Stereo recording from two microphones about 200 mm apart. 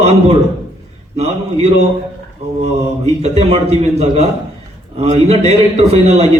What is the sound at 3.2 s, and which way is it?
A man's voice, 35° right (ahead or behind).